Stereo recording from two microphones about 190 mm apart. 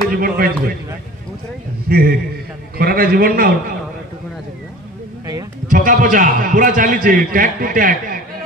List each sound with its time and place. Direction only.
0.1 s a man's voice: 50° right (ahead or behind)
1.9 s a man's voice: 55° right (ahead or behind)
5.7 s a man's voice: 45° right (ahead or behind)